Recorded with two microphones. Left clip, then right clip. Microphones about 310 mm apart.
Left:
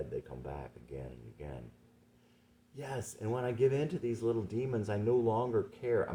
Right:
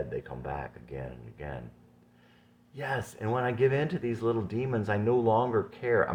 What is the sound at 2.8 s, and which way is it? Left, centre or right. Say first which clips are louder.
Speech: right 8 dB; centre.